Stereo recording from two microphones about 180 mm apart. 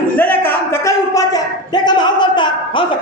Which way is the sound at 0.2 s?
10° left (ahead or behind).